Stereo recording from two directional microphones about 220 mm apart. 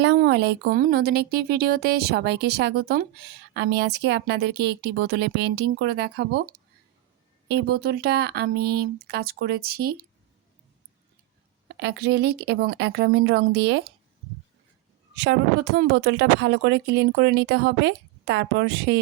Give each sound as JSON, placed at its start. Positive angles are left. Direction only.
{"t": 0.0, "sound": "speech", "side_deg": -50}
{"t": 11.7, "sound": "speech", "side_deg": -50}
{"t": 15.1, "sound": "speech", "side_deg": -50}